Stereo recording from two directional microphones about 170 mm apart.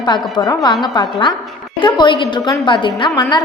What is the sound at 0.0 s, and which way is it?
Speech, 25° left (ahead or behind).